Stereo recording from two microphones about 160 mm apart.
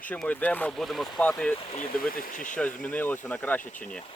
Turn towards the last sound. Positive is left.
turn(degrees=5)  # may be behind; listen again after turning